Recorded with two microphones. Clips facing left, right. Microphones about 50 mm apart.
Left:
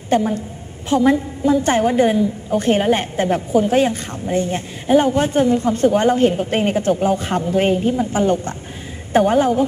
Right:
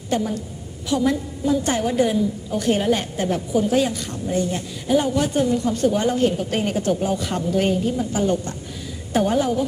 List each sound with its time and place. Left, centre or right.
0.1 s a woman's voice: left